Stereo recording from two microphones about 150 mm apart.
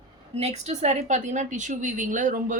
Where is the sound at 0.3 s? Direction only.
45° right (ahead or behind).